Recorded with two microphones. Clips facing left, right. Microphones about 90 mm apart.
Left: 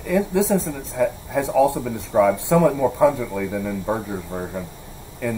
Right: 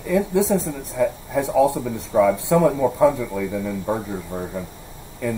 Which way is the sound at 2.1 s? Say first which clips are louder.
Even; 50° left (ahead or behind).